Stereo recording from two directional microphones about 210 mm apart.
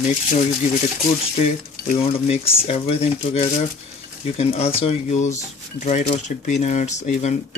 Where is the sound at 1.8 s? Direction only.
30° left (ahead or behind).